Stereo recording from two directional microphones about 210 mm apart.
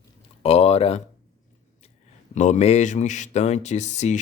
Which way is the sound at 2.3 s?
35° left (ahead or behind).